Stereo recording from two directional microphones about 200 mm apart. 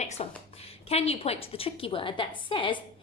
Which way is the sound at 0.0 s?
35° left (ahead or behind).